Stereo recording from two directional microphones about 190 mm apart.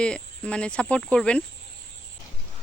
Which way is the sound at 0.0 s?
5° left (ahead or behind).